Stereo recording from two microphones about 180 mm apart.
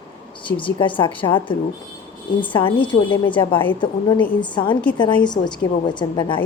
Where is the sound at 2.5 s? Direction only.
25° left (ahead or behind).